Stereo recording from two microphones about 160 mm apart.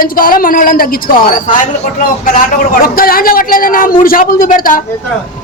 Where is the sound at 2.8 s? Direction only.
65° left (ahead or behind).